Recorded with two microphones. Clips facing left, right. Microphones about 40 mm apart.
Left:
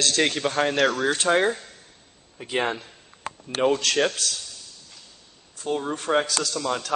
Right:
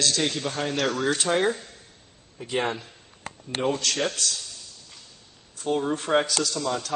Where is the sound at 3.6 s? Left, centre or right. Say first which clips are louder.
Left 5 dB; left.